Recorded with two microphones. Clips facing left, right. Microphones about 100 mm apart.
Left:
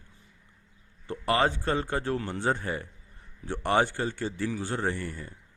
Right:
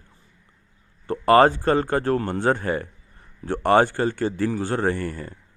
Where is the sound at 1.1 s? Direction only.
55° right (ahead or behind).